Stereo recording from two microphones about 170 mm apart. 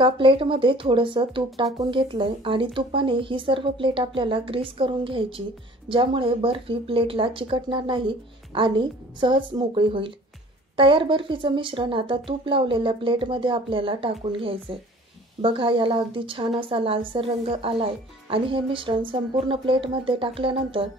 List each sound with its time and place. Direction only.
0.0 s speech: 30° right (ahead or behind)